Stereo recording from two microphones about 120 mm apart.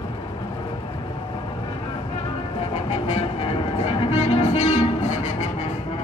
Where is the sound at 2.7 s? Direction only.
65° left (ahead or behind).